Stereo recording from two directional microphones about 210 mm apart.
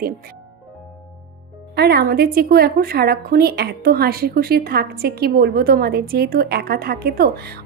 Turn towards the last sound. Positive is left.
turn(degrees=-50)  # may be behind; listen again after turning